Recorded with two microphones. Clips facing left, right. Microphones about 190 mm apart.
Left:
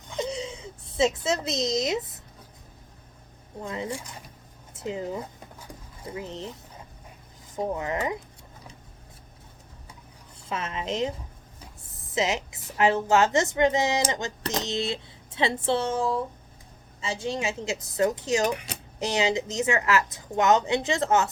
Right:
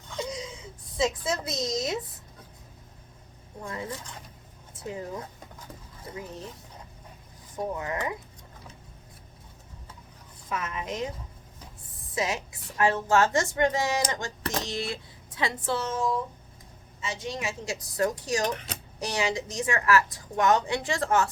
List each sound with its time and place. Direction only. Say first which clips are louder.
0.1 s a sound: left 4 dB; 25° left (ahead or behind)
3.6 s speech: left 3 dB; 20° left (ahead or behind)
4.8 s a woman's voice: left 4 dB; 25° left (ahead or behind)
6.1 s a woman's voice: left 4 dB; 25° left (ahead or behind)
7.5 s a woman's voice: left 3 dB; 25° left (ahead or behind)
10.5 s a woman's voice: left 2 dB; 25° left (ahead or behind)
12.1 s a woman's voice: left 3 dB; 20° left (ahead or behind)
18.4 s speech: left 3 dB; 10° left (ahead or behind)
18.9 s a woman's voice: left 4 dB; 25° left (ahead or behind)